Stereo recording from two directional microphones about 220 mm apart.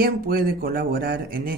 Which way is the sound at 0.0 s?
45° right (ahead or behind).